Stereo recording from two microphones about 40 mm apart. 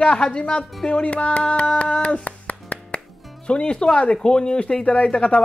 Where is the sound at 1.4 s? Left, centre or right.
Left.